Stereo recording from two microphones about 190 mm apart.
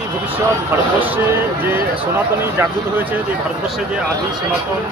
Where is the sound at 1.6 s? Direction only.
10° right (ahead or behind).